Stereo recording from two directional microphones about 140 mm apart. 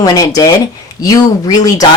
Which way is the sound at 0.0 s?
25° left (ahead or behind).